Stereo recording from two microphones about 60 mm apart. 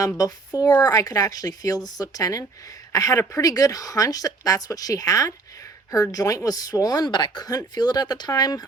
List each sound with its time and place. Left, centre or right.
0.2 s speech: left
2.9 s a woman's voice: left